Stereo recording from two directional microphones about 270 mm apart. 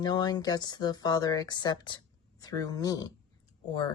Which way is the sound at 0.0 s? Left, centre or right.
Centre.